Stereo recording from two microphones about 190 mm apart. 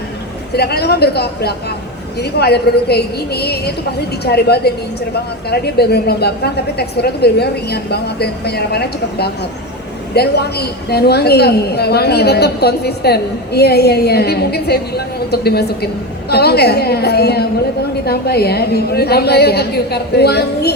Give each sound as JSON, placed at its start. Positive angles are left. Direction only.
{"t": 0.5, "sound": "a woman's voice", "side_deg": 55}